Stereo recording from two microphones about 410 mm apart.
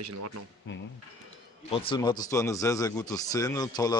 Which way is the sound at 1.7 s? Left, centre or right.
Centre.